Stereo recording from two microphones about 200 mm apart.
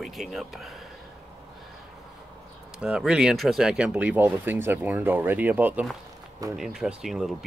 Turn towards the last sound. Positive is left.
turn(degrees=0)  # may be behind; listen again after turning